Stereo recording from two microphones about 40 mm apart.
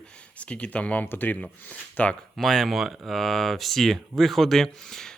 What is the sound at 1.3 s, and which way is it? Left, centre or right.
Speech, left.